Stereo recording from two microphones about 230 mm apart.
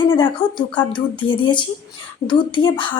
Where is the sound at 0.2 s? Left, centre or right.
Left.